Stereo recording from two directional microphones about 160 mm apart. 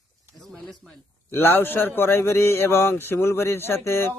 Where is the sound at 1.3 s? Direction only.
15° left (ahead or behind).